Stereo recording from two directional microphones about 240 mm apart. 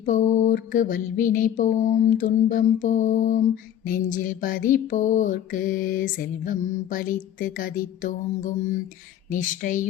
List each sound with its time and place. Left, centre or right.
0.0 s mantra: left